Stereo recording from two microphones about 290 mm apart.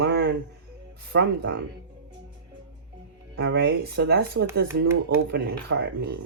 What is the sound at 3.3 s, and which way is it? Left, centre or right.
Speech, right.